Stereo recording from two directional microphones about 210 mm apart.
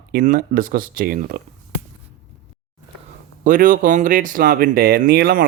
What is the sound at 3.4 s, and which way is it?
Speech, 40° right (ahead or behind).